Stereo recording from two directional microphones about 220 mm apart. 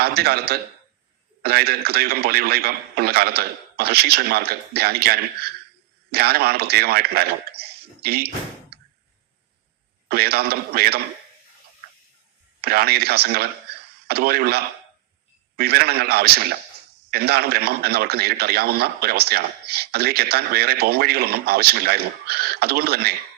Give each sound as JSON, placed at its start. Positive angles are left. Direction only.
{"t": 0.0, "sound": "a man's voice", "side_deg": -45}
{"t": 8.7, "sound": "a sound", "side_deg": -45}
{"t": 10.1, "sound": "a man's voice", "side_deg": -45}
{"t": 12.6, "sound": "a man's voice", "side_deg": -45}